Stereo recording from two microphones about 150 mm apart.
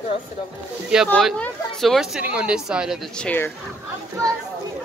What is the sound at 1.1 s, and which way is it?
Speech, 5° left (ahead or behind).